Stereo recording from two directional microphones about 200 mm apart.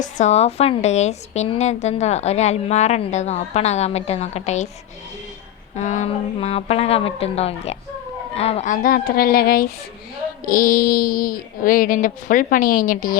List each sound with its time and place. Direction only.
0.0 s a woman's voice: 35° left (ahead or behind)
5.7 s a woman's voice: 35° left (ahead or behind)